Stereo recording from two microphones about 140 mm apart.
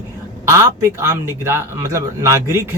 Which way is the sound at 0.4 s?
20° right (ahead or behind).